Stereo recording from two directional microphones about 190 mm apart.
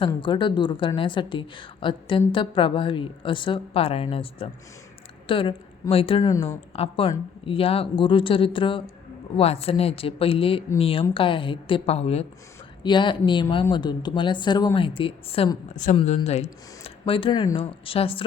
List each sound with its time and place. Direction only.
0.0 s speech: 25° left (ahead or behind)
6.3 s speech: 15° left (ahead or behind)
6.7 s speech: 30° left (ahead or behind)